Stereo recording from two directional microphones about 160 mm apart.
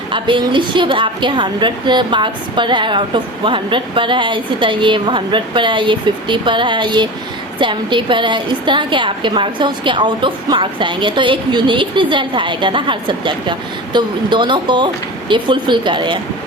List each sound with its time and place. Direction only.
0.1 s a woman's voice: 30° right (ahead or behind)